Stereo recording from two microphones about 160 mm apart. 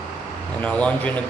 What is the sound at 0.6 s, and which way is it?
Speech, 10° left (ahead or behind).